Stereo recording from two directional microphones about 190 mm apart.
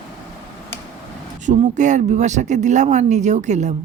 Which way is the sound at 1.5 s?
40° right (ahead or behind).